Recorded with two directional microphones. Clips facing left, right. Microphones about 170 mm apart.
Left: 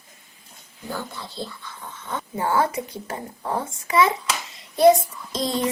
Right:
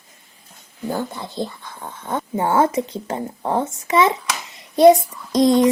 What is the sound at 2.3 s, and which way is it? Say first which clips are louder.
A child's voice: right 5 dB; 25° right (ahead or behind).